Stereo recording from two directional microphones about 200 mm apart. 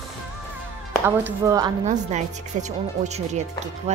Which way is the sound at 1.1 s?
15° right (ahead or behind).